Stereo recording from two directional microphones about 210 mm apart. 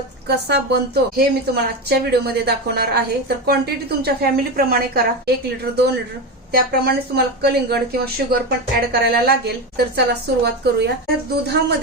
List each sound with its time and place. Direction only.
0.3 s a woman's voice: 50° right (ahead or behind)
6.5 s a woman's voice: 50° right (ahead or behind)